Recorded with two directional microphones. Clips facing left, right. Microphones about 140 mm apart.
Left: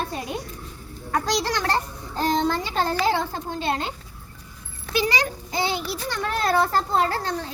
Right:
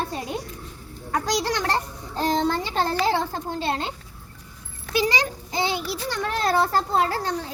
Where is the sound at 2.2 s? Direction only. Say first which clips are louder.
Even; 30° right (ahead or behind).